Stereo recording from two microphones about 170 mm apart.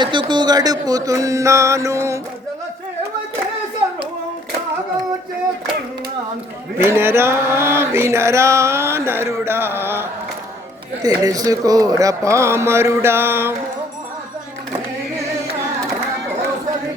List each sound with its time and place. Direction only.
0.0 s a sound: 25° right (ahead or behind)
6.7 s male singing: 15° right (ahead or behind)
11.0 s speech: 20° right (ahead or behind)